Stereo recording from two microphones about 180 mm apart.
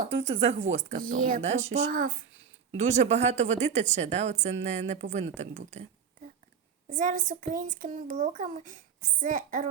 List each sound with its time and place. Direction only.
0.0 s a child's voice: 35° right (ahead or behind)
6.9 s a child's voice: 45° right (ahead or behind)